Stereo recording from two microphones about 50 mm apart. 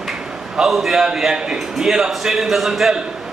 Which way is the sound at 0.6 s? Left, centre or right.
Centre.